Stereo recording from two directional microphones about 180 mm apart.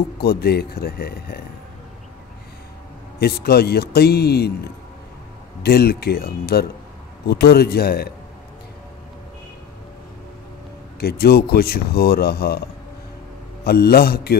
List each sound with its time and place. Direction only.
0.2 s a man's voice: 60° left (ahead or behind)
3.2 s a man's voice: 60° left (ahead or behind)
5.6 s a man's voice: 60° left (ahead or behind)
11.0 s a man's voice: 60° left (ahead or behind)
13.7 s a man's voice: 60° left (ahead or behind)